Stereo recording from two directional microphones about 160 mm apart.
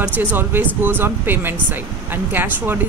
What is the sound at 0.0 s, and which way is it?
Speech, 10° right (ahead or behind).